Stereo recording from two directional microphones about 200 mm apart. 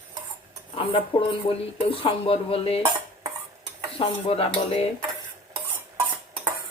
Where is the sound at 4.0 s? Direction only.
30° left (ahead or behind).